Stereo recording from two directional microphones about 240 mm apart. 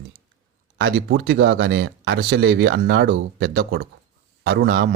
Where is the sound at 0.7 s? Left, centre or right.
Right.